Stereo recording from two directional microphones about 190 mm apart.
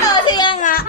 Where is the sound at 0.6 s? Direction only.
50° left (ahead or behind).